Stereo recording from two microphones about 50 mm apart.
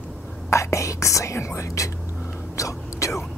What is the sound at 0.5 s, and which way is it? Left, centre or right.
Whispering, left.